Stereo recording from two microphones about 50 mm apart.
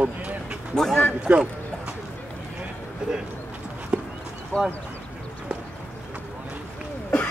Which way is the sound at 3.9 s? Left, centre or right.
Right.